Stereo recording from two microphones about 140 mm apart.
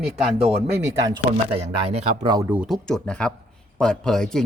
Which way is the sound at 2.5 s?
10° right (ahead or behind).